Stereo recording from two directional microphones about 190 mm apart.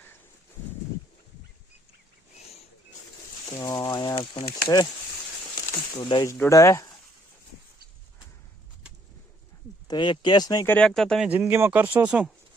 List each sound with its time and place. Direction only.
3.6 s speech: 20° left (ahead or behind)
6.3 s speech: 15° left (ahead or behind)
9.8 s speech: 25° left (ahead or behind)
10.8 s speech: 5° left (ahead or behind)
11.3 s speech: 10° right (ahead or behind)